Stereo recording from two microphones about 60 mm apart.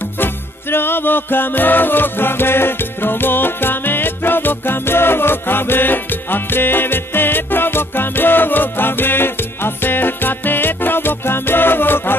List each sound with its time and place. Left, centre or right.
0.2 s music: left